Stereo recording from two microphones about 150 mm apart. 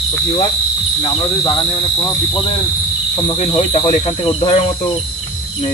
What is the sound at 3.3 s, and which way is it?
Speech, 45° left (ahead or behind).